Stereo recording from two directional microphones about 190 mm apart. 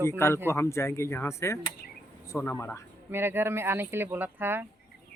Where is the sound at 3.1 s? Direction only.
10° right (ahead or behind).